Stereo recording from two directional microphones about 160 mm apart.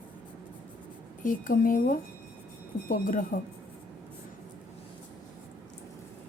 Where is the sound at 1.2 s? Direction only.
55° left (ahead or behind).